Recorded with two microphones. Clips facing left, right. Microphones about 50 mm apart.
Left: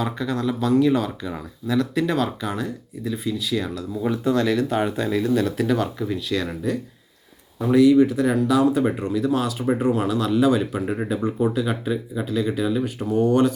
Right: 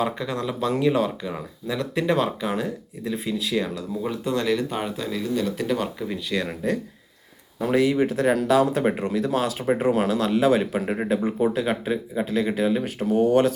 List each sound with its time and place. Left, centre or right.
0.0 s speech: centre
4.2 s speech: centre
4.4 s speech: centre
4.9 s speech: centre
5.7 s speech: centre
7.6 s speech: right